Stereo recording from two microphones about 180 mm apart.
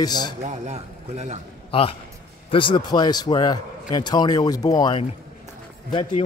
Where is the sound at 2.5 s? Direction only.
25° left (ahead or behind).